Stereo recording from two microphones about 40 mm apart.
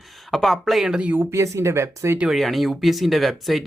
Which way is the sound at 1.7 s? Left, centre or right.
Right.